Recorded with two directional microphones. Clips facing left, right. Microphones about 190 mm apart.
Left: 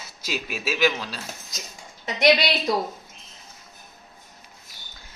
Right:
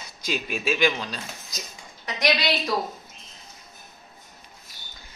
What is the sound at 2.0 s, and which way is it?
Speech, 25° left (ahead or behind).